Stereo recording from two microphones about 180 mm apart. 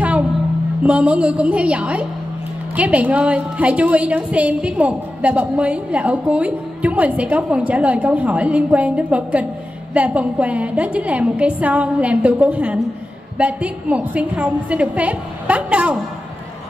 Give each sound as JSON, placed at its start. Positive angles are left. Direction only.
{"t": 0.8, "sound": "a woman's voice", "side_deg": -5}